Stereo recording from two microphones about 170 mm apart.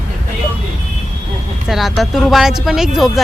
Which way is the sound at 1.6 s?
Centre (ahead or behind).